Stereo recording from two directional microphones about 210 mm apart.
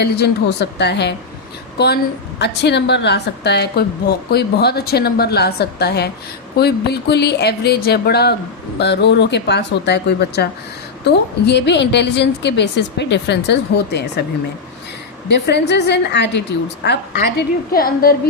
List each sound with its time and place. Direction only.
0.0 s a woman's voice: 55° left (ahead or behind)
15.3 s a woman's voice: 55° left (ahead or behind)